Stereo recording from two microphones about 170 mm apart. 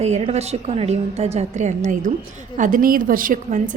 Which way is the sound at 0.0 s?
40° right (ahead or behind).